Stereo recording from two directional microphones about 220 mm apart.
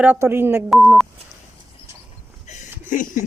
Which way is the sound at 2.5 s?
35° left (ahead or behind).